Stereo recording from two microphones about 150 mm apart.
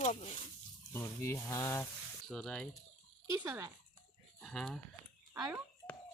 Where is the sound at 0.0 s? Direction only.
50° left (ahead or behind).